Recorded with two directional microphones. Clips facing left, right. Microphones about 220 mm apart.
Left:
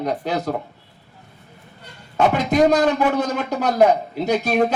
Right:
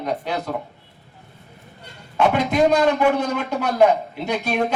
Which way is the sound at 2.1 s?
40° left (ahead or behind).